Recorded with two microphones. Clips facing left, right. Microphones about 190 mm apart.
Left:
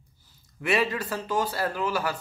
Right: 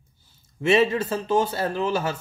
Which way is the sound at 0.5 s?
25° right (ahead or behind).